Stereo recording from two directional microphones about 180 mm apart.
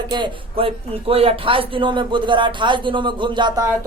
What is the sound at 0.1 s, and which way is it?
Speech, 30° right (ahead or behind).